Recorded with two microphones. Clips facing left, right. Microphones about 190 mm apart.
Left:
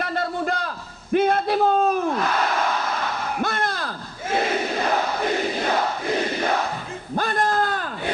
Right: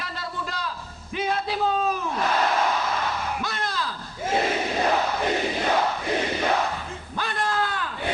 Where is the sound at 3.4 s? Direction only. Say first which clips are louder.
Left 4 dB; 55° left (ahead or behind).